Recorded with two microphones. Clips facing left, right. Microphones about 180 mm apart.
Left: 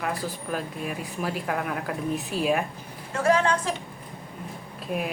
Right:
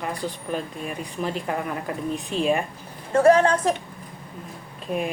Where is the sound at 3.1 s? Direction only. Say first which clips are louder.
Right 6 dB; 45° right (ahead or behind).